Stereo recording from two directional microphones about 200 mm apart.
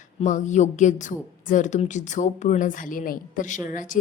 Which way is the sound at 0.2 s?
40° left (ahead or behind).